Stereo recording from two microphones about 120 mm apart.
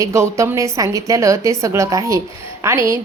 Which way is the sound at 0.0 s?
25° right (ahead or behind).